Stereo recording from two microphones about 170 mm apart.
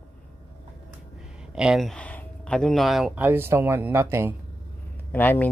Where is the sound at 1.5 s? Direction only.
5° right (ahead or behind).